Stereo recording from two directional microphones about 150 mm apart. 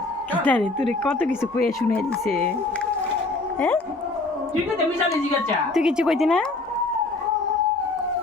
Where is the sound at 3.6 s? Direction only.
10° left (ahead or behind).